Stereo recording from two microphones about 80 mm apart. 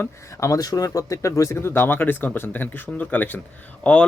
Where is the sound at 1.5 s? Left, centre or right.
Left.